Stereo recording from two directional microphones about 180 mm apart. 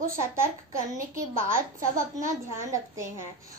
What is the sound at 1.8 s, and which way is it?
Speech, 50° right (ahead or behind).